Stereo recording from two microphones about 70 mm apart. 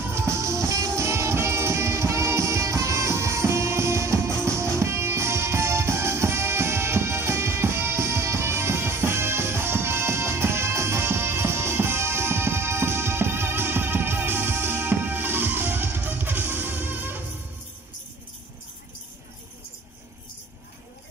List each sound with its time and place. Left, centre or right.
0.1 s music: right